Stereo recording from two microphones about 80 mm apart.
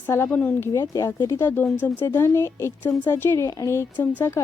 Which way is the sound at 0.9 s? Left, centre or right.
Left.